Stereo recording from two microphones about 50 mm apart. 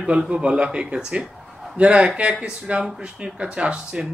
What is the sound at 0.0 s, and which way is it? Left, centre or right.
Speech, right.